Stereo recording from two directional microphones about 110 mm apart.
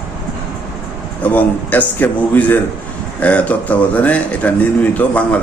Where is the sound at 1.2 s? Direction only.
15° left (ahead or behind).